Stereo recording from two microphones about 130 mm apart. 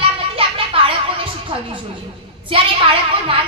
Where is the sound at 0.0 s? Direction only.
45° right (ahead or behind).